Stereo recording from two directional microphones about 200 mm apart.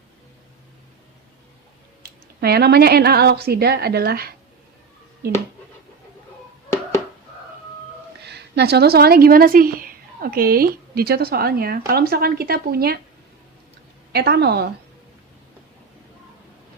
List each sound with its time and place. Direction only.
2.4 s a woman's voice: 55° right (ahead or behind)
8.2 s a woman's voice: 55° right (ahead or behind)
14.1 s a woman's voice: 55° right (ahead or behind)